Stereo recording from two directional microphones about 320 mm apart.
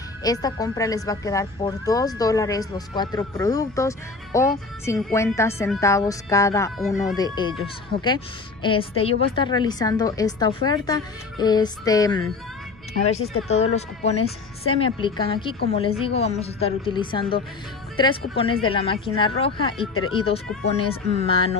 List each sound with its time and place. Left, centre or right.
0.2 s speech: centre
8.6 s speech: centre
13.7 s speech: centre